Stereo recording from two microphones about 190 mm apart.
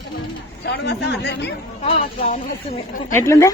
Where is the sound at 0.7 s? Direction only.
65° left (ahead or behind).